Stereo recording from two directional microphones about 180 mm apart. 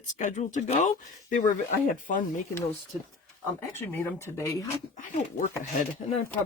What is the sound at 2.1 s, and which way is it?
Speech, 45° left (ahead or behind).